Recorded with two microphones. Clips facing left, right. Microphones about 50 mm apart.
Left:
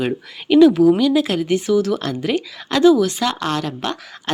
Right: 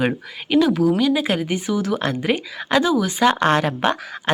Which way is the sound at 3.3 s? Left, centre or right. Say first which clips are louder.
Right 5 dB; right.